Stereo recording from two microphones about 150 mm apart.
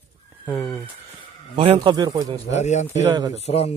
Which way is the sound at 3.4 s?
45° left (ahead or behind).